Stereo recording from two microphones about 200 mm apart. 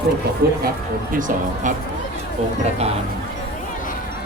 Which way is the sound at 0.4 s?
50° right (ahead or behind).